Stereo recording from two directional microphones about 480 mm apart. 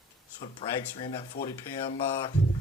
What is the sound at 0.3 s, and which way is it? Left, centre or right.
Speech, centre.